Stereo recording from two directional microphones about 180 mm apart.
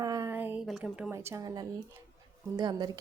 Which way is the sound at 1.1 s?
15° right (ahead or behind).